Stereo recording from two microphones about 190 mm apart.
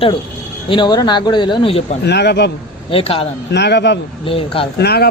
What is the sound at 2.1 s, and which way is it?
Speech, 60° left (ahead or behind).